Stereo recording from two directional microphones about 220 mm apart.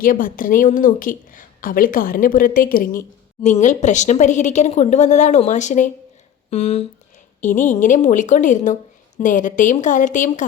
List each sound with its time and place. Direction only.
0.0 s a woman's voice: 40° left (ahead or behind)